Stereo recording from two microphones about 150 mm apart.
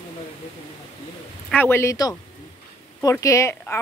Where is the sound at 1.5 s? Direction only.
15° left (ahead or behind).